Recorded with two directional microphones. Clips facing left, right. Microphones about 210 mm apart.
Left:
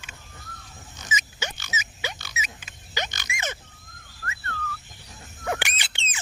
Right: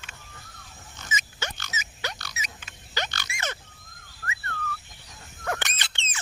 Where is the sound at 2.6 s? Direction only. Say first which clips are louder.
Even; 15° left (ahead or behind).